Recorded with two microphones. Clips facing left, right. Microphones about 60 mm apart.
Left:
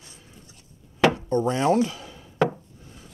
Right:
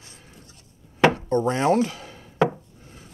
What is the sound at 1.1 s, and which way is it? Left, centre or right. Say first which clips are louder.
Speech: right 1 dB; right.